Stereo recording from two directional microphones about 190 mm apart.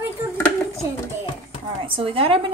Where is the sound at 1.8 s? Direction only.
30° right (ahead or behind).